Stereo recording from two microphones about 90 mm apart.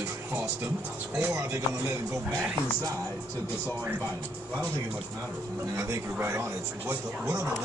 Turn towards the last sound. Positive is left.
turn(degrees=-30)  # may be behind; listen again after turning